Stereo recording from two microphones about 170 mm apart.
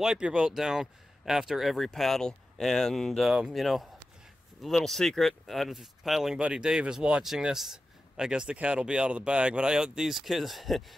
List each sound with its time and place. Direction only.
0.0 s speech: 5° right (ahead or behind)